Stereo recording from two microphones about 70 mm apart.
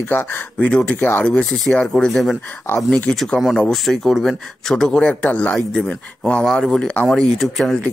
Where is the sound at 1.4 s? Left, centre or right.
Centre.